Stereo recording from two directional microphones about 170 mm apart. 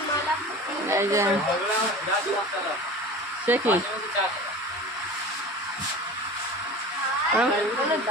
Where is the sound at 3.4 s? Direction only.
10° right (ahead or behind).